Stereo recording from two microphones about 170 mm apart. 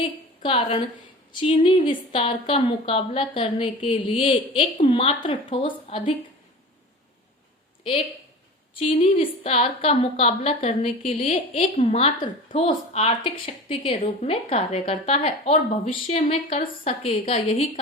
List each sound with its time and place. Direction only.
0.0 s a woman's voice: 35° left (ahead or behind)
8.7 s a woman's voice: 30° left (ahead or behind)